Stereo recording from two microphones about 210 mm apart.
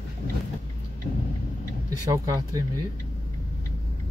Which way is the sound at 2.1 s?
20° right (ahead or behind).